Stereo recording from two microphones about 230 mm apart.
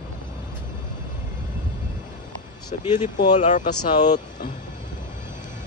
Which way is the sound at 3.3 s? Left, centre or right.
Left.